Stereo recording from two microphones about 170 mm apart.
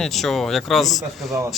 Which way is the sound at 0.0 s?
Centre (ahead or behind).